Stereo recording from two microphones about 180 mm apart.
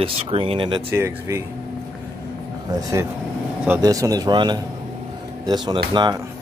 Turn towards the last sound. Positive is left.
turn(degrees=-25)  # may be behind; listen again after turning